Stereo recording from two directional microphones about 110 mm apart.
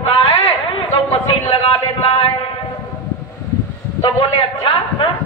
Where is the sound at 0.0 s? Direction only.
55° left (ahead or behind).